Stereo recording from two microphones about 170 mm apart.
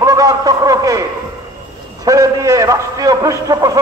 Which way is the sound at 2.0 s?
20° right (ahead or behind).